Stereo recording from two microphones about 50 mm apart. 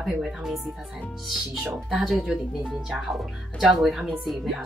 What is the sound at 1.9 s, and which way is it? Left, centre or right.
Speech, centre.